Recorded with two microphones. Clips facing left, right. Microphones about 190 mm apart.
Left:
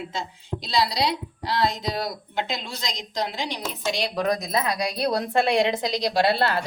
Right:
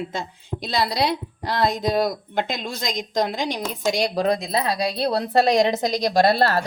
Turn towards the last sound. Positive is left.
turn(degrees=-40)  # may be behind; listen again after turning